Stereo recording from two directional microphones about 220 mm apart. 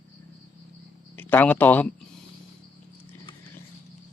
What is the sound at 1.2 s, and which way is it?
Speech, 10° left (ahead or behind).